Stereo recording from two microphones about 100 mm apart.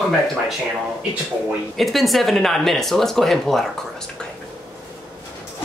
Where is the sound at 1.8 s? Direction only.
Centre (ahead or behind).